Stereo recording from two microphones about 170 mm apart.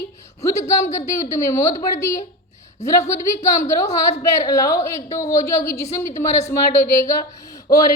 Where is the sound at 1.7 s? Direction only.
45° left (ahead or behind).